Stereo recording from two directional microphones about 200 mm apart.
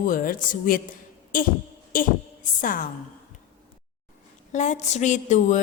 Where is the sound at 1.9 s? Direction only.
45° left (ahead or behind).